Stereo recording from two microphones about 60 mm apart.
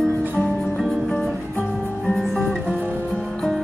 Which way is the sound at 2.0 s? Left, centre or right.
Centre.